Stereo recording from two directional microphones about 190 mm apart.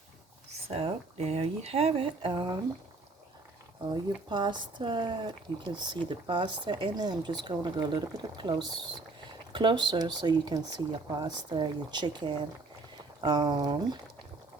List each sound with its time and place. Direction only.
0.7 s speech: 35° right (ahead or behind)
3.9 s speech: 25° right (ahead or behind)